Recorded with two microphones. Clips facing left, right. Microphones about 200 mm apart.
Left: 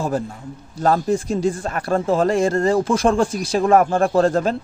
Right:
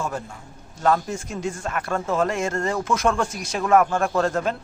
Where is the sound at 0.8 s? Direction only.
35° left (ahead or behind).